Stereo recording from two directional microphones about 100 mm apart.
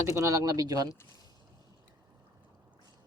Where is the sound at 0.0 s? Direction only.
30° right (ahead or behind).